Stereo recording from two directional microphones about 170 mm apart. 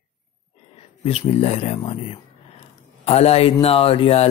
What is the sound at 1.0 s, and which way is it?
Speech, 35° left (ahead or behind).